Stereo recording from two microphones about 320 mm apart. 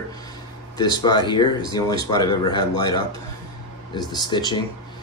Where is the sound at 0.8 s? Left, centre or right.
Centre.